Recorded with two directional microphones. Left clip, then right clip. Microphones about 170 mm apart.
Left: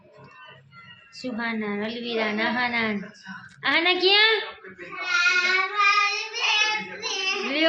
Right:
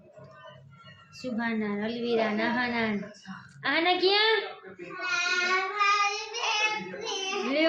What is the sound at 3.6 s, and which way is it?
Female singing, 15° left (ahead or behind).